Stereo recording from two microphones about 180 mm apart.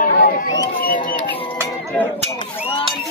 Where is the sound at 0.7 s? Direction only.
50° left (ahead or behind).